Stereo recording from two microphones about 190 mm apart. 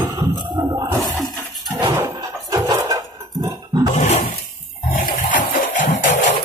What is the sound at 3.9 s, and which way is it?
Roaring cats, 35° left (ahead or behind).